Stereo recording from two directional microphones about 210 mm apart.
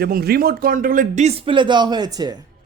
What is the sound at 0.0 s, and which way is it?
Speech, 50° right (ahead or behind).